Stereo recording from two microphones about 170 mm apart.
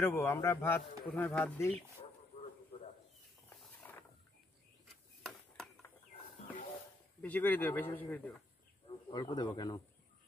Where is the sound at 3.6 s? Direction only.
10° left (ahead or behind).